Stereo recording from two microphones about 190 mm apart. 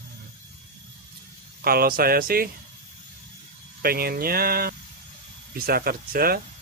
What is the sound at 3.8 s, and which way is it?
Speech, 50° right (ahead or behind).